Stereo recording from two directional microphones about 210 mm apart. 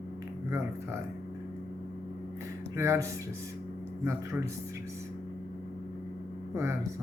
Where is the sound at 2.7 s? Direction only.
10° right (ahead or behind).